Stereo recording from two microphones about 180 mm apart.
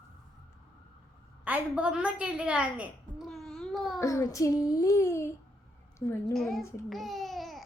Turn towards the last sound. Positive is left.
turn(degrees=0)  # may be behind; listen again after turning